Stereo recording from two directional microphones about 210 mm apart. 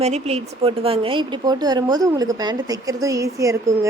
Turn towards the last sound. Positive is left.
turn(degrees=-15)  # may be behind; listen again after turning